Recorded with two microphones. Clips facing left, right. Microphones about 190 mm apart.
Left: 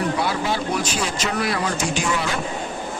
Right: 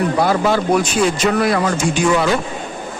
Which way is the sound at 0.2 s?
50° right (ahead or behind).